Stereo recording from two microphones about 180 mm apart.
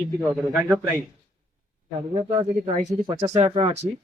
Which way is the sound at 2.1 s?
35° right (ahead or behind).